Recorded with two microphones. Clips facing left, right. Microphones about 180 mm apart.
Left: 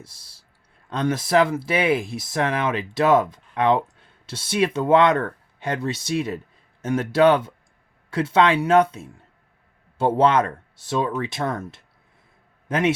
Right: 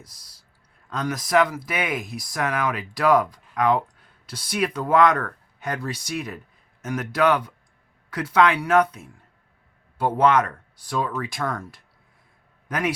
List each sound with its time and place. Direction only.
0.0 s a man's voice: 25° left (ahead or behind)